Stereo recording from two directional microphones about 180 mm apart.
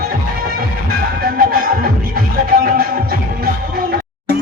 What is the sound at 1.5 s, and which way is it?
Music, 50° right (ahead or behind).